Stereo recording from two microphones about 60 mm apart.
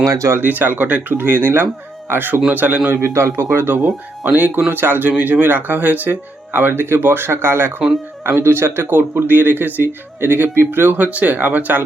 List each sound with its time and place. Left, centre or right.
0.0 s speech: right
0.3 s speech: right
2.9 s speech: right
4.3 s speech: right